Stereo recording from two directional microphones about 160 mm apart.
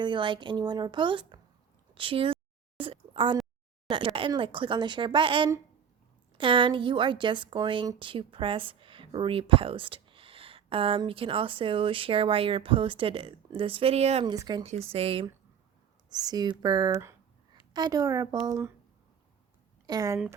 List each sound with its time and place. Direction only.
0.0 s speech: 30° right (ahead or behind)
2.0 s a sound: 35° right (ahead or behind)
3.8 s a woman's voice: 30° right (ahead or behind)
14.3 s speech: 25° right (ahead or behind)
14.6 s a woman's voice: 40° right (ahead or behind)
16.0 s a woman's voice: 25° right (ahead or behind)
19.9 s speech: 20° right (ahead or behind)